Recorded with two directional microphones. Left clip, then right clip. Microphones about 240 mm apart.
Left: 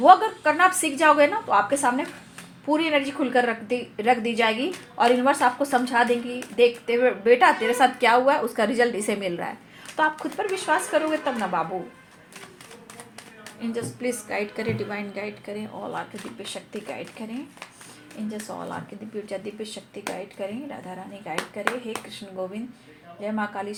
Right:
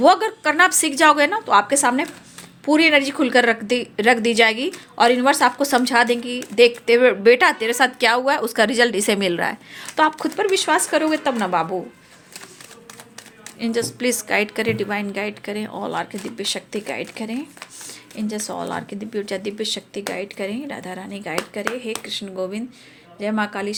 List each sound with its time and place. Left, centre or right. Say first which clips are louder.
0.0 s a woman's voice: even; right
13.6 s a woman's voice: right 8 dB; right
23.2 s a woman's voice: right 5 dB; right